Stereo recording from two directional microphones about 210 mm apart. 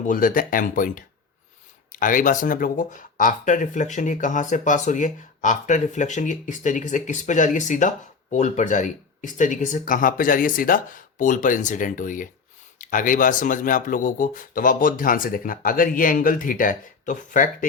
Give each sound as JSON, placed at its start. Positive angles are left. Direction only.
{"t": 0.0, "sound": "speech", "side_deg": 40}